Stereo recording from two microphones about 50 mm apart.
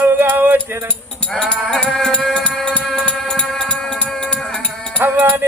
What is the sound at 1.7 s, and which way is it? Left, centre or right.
Music, centre.